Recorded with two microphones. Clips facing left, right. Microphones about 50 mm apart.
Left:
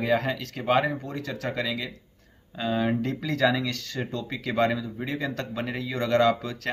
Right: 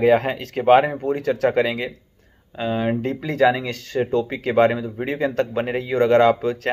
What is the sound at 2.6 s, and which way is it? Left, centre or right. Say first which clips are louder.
Speech: right 4 dB; right.